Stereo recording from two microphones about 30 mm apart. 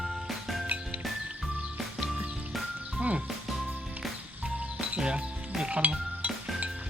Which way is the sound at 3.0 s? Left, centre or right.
Right.